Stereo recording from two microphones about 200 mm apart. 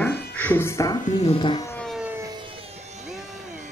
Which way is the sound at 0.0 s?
10° left (ahead or behind).